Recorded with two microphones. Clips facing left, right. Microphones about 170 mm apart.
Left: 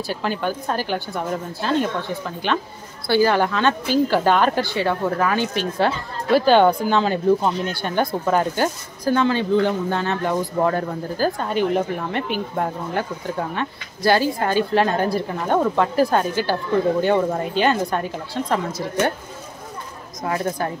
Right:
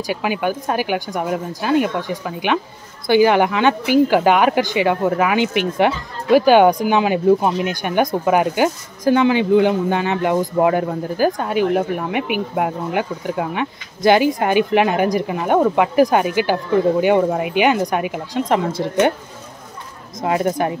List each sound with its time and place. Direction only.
0.0 s speech: 10° right (ahead or behind)
20.2 s speech: 20° right (ahead or behind)